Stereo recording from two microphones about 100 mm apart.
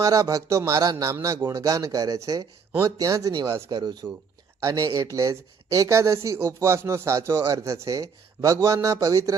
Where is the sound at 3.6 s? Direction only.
45° right (ahead or behind).